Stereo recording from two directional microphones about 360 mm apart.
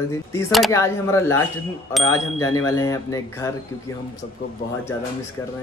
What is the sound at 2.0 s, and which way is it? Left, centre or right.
Speech, left.